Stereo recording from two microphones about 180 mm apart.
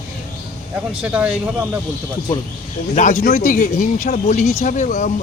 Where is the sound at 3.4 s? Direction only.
50° left (ahead or behind).